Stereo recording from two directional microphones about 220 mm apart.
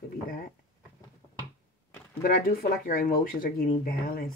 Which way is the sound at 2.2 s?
40° left (ahead or behind).